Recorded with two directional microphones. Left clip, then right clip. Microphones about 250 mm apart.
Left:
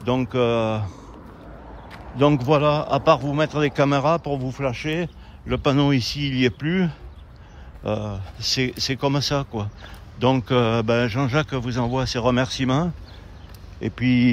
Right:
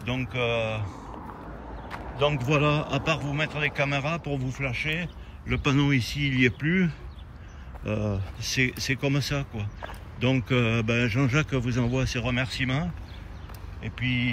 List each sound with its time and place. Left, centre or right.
0.0 s a man's voice: centre
2.3 s a man's voice: centre